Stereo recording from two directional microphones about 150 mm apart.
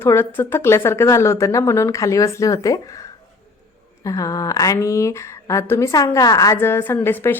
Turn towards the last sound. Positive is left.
turn(degrees=15)  # may be behind; listen again after turning